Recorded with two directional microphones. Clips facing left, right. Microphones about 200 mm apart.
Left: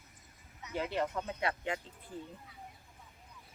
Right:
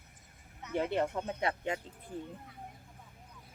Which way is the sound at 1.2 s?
20° right (ahead or behind).